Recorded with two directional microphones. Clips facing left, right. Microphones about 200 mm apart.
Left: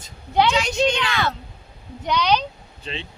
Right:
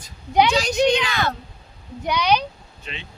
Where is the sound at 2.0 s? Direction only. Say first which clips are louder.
Even; 10° right (ahead or behind).